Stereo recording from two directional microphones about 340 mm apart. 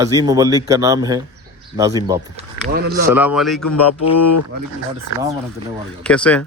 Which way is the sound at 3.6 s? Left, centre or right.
Left.